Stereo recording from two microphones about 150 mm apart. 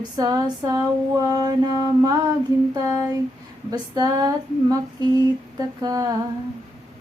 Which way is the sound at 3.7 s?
25° right (ahead or behind).